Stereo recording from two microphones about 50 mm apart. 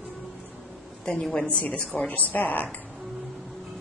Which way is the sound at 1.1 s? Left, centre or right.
Centre.